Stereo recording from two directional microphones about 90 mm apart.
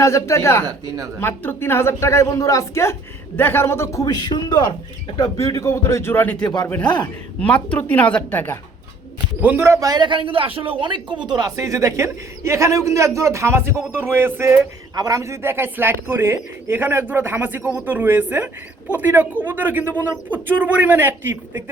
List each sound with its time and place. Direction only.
0.0 s speech: 35° left (ahead or behind)
0.9 s a man's voice: 40° right (ahead or behind)
1.2 s speech: 25° left (ahead or behind)
4.0 s a man's voice: 50° left (ahead or behind)
5.1 s speech: 45° left (ahead or behind); by 6.3 s 25° left (ahead or behind)
6.3 s a man's voice: 50° left (ahead or behind)
6.7 s speech: 15° left (ahead or behind)
9.4 s speech: 20° right (ahead or behind)
9.6 s a man's voice: 40° right (ahead or behind)
10.0 s a man's voice: 65° right (ahead or behind)
11.3 s speech: 50° right (ahead or behind)
11.5 s a man's voice: 35° right (ahead or behind)
14.9 s speech: 40° right (ahead or behind); by 21.6 s 25° right (ahead or behind)